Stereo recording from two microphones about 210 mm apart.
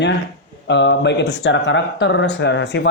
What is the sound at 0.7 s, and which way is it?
A man's voice, 55° left (ahead or behind).